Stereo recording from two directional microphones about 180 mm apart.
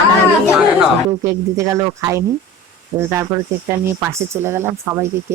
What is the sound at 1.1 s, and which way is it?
Speech, 15° right (ahead or behind).